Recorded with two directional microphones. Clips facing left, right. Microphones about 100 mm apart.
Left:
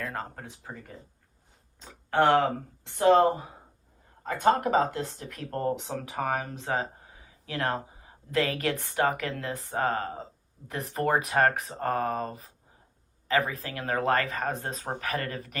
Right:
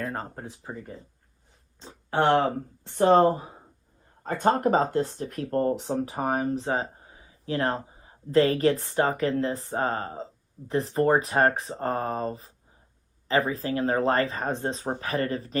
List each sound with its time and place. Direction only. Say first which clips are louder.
0.0 s speech: right 3 dB; 30° right (ahead or behind)
2.1 s a woman's voice: even; 40° right (ahead or behind)